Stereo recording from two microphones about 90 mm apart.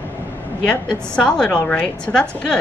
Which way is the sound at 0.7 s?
10° left (ahead or behind).